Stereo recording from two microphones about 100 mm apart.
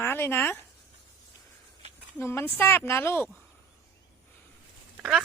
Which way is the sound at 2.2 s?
25° left (ahead or behind).